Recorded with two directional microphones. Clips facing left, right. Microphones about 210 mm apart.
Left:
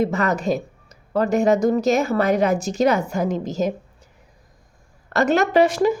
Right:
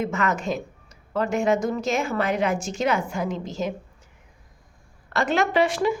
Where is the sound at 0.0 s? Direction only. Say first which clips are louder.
Left 5 dB; 35° left (ahead or behind).